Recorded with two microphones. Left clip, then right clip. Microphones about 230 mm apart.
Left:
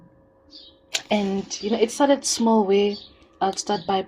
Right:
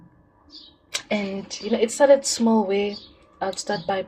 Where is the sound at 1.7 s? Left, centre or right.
Left.